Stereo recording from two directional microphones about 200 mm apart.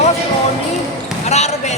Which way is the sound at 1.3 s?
35° left (ahead or behind).